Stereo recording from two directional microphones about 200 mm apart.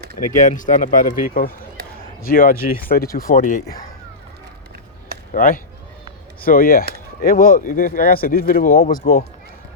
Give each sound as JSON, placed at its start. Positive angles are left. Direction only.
{"t": 0.3, "sound": "speech", "side_deg": 40}
{"t": 5.3, "sound": "speech", "side_deg": 45}